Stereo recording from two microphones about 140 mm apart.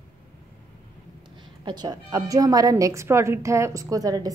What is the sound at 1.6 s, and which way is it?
A woman's voice, 30° right (ahead or behind).